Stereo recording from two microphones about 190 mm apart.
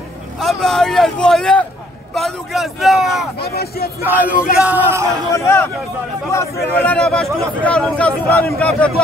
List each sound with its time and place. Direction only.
0.4 s speech: centre (ahead or behind)
3.3 s speech: 55° left (ahead or behind)
4.0 s speech: 10° right (ahead or behind)
5.3 s a man's voice: 15° left (ahead or behind)